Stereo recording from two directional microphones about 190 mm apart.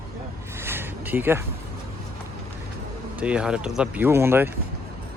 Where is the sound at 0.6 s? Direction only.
10° right (ahead or behind).